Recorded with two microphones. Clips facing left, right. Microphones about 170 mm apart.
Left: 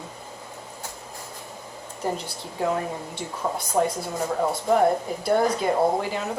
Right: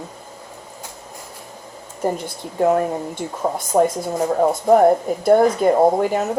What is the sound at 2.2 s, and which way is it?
Speech, 50° right (ahead or behind).